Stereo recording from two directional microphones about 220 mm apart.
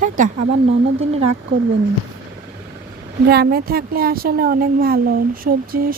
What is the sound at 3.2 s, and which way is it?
A woman's voice, 45° right (ahead or behind).